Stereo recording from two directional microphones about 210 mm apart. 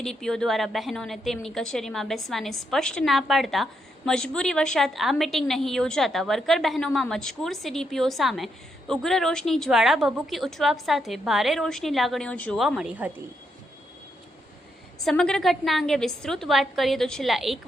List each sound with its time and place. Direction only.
0.0 s a woman's voice: centre (ahead or behind)
15.0 s a woman's voice: 5° left (ahead or behind)